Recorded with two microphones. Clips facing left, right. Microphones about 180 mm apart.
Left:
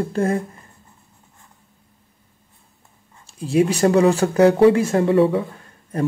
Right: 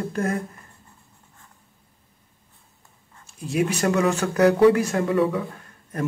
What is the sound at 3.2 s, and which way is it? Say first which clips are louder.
A man's voice: left 6 dB; 30° left (ahead or behind).